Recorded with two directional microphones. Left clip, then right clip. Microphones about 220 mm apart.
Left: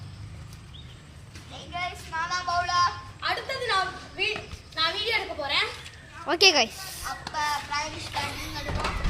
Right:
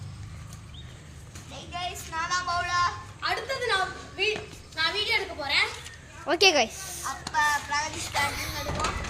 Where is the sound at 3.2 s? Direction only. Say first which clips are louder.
Even; centre (ahead or behind).